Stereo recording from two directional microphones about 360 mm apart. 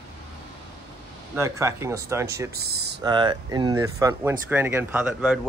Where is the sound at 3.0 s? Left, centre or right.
Centre.